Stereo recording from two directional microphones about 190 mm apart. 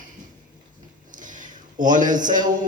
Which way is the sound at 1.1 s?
45° right (ahead or behind).